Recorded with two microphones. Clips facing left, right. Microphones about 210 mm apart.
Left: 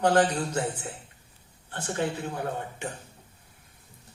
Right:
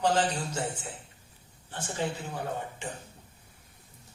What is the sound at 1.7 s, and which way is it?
Speech, 60° left (ahead or behind).